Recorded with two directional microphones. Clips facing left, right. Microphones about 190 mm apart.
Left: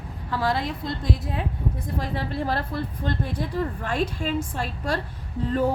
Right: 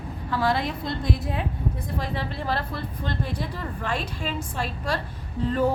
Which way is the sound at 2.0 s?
45° left (ahead or behind).